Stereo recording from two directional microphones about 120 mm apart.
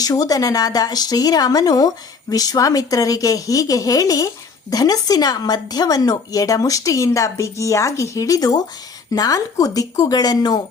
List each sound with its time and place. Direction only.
0.0 s a woman's voice: 30° left (ahead or behind)